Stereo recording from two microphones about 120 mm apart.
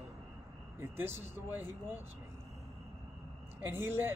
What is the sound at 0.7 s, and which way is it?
Speech, 20° right (ahead or behind).